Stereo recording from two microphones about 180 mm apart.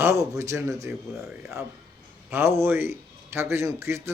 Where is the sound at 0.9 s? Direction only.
Centre (ahead or behind).